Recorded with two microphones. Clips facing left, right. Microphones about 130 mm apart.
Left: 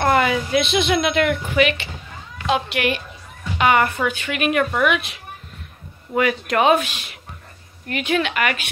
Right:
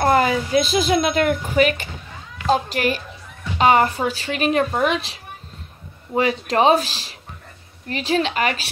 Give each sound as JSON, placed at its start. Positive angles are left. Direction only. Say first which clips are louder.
{"t": 0.0, "sound": "a woman's voice", "louder": "right 1 dB", "side_deg": -35}